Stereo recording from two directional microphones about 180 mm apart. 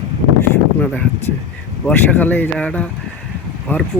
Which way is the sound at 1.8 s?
10° left (ahead or behind).